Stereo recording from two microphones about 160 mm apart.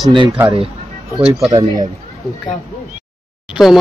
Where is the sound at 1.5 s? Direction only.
25° right (ahead or behind).